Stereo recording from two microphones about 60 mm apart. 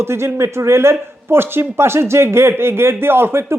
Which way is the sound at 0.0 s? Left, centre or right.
Right.